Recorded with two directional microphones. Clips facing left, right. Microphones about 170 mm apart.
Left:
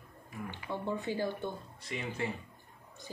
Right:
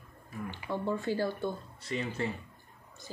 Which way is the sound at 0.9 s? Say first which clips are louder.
Right 3 dB; 20° left (ahead or behind).